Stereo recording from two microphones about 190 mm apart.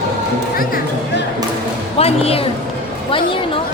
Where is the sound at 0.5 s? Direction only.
50° left (ahead or behind).